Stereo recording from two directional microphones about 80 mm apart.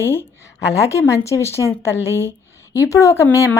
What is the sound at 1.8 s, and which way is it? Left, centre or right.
A woman's voice, left.